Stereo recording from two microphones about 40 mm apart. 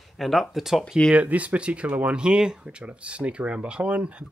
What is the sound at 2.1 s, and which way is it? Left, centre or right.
Speech, right.